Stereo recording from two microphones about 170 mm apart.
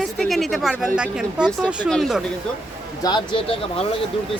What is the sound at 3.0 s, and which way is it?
Speech, 25° left (ahead or behind).